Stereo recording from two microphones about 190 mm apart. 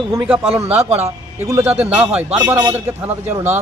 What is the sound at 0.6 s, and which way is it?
A man's voice, 10° right (ahead or behind).